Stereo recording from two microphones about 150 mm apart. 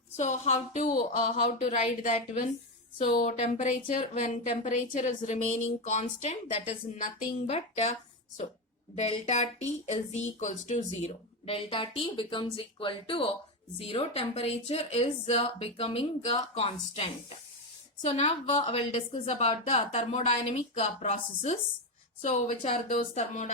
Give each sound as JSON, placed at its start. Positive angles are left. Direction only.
{"t": 0.2, "sound": "a woman's voice", "side_deg": 50}
{"t": 3.2, "sound": "a woman's voice", "side_deg": 50}
{"t": 9.2, "sound": "a woman's voice", "side_deg": 50}
{"t": 11.0, "sound": "a woman's voice", "side_deg": 40}
{"t": 18.1, "sound": "a woman's voice", "side_deg": 40}